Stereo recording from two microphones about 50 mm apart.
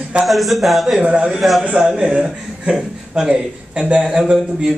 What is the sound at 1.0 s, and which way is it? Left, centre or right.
A man's voice, right.